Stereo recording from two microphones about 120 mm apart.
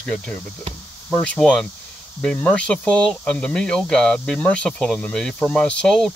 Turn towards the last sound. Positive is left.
turn(degrees=5)  # may be behind; listen again after turning